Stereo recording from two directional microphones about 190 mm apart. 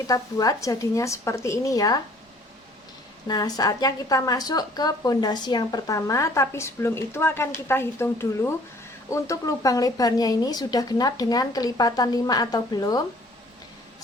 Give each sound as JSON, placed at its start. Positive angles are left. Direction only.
{"t": 0.1, "sound": "a woman's voice", "side_deg": 20}
{"t": 3.2, "sound": "a woman's voice", "side_deg": 20}